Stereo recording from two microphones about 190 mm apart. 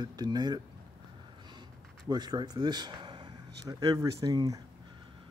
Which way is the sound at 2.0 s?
20° right (ahead or behind).